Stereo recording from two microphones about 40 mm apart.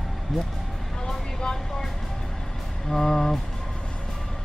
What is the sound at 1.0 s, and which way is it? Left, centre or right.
Vehicle, centre.